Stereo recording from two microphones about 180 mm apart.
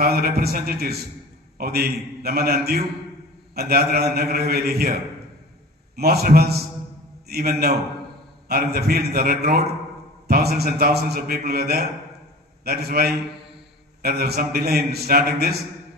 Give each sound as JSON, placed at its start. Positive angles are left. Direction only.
{"t": 0.0, "sound": "a man's voice", "side_deg": -55}
{"t": 5.9, "sound": "a man's voice", "side_deg": -60}